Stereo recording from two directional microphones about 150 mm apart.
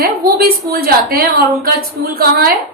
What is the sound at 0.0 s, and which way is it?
A woman's voice, 80° right.